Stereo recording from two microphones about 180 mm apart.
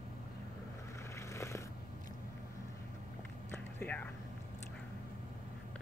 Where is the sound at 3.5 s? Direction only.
10° left (ahead or behind).